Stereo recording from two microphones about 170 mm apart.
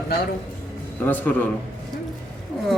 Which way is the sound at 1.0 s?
10° left (ahead or behind).